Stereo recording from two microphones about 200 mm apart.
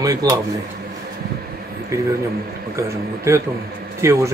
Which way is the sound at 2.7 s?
15° right (ahead or behind).